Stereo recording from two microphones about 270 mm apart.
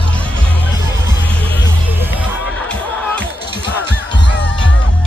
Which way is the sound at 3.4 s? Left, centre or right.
Left.